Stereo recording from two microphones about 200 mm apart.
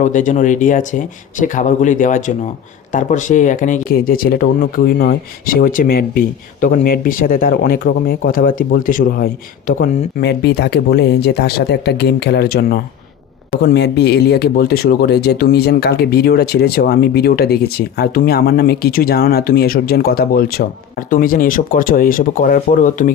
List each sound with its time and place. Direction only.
0.0 s speech: 40° left (ahead or behind)